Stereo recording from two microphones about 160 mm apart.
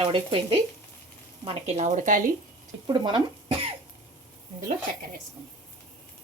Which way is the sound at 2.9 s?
30° right (ahead or behind).